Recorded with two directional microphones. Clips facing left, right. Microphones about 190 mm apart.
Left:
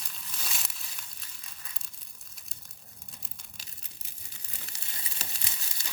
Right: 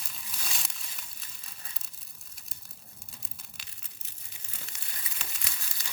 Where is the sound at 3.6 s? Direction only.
40° left (ahead or behind).